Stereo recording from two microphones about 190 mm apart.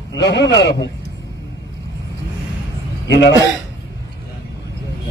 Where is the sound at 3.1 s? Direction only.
65° left (ahead or behind).